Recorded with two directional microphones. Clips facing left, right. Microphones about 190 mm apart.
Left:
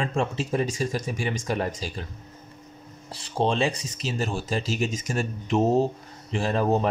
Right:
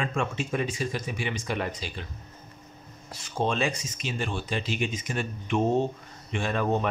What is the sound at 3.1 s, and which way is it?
Speech, 30° left (ahead or behind).